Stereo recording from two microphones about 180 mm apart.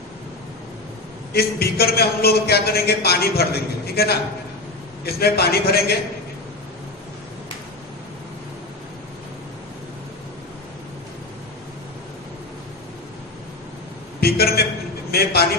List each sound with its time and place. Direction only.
1.3 s a man's voice: 60° left (ahead or behind)
14.2 s a sound: 60° left (ahead or behind)
15.1 s a man's voice: 60° left (ahead or behind)